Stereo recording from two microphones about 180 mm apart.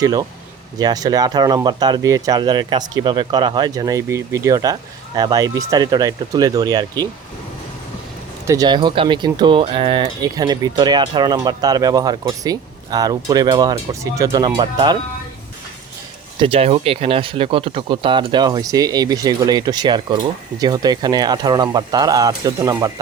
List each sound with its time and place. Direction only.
0.0 s speech: 20° right (ahead or behind)
8.4 s speech: 20° right (ahead or behind)
16.4 s speech: 30° right (ahead or behind)